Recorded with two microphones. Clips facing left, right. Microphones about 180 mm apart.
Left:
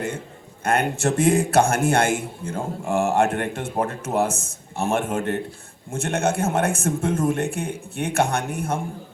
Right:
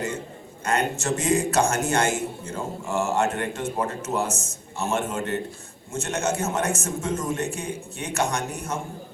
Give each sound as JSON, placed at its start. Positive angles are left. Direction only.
{"t": 0.6, "sound": "a man's voice", "side_deg": 55}